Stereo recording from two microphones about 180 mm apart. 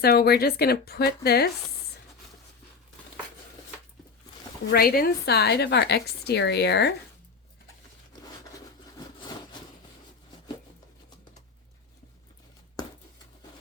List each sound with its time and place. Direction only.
0.0 s a woman's voice: 60° left (ahead or behind)
4.7 s a woman's voice: 55° left (ahead or behind)